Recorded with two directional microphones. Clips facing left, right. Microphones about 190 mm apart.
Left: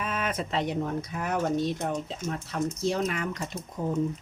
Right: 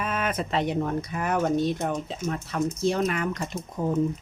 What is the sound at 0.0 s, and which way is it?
Speech, 55° right (ahead or behind).